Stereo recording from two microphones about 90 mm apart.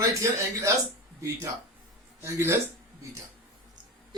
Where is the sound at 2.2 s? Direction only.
30° right (ahead or behind).